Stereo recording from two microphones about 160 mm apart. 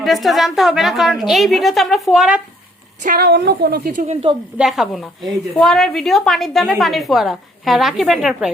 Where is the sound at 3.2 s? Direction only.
85° right; by 4.3 s 45° right (ahead or behind).